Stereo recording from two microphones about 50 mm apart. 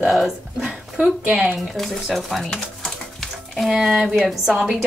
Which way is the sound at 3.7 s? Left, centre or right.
Centre.